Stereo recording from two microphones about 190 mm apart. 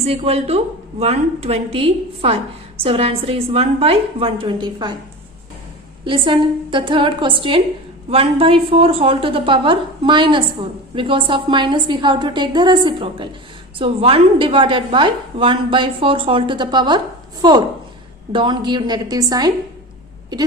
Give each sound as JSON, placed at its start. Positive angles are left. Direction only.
{"t": 0.0, "sound": "a woman's voice", "side_deg": -30}
{"t": 6.1, "sound": "a woman's voice", "side_deg": -25}